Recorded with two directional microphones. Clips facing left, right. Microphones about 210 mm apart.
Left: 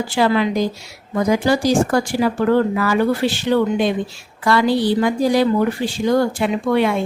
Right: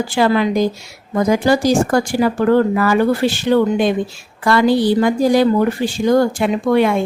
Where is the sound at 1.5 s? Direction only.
45° right (ahead or behind).